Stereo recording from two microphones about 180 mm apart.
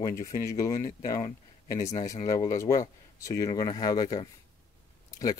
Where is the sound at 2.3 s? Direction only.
20° left (ahead or behind).